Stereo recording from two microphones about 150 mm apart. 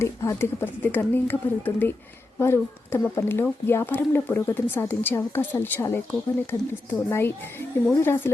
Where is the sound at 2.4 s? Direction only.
15° left (ahead or behind).